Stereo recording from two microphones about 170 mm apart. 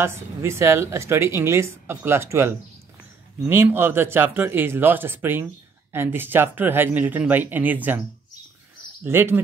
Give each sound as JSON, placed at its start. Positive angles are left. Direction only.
{"t": 0.0, "sound": "speech", "side_deg": -15}
{"t": 9.0, "sound": "speech", "side_deg": -15}